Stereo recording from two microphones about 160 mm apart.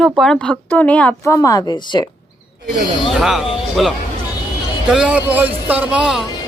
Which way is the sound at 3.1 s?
5° right (ahead or behind).